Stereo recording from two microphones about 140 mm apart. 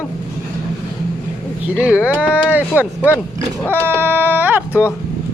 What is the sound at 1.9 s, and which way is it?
Speech, 10° right (ahead or behind).